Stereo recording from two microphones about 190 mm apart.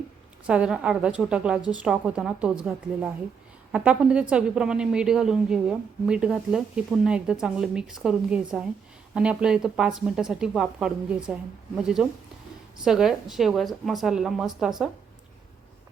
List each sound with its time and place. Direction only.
0.4 s a woman's voice: 5° right (ahead or behind)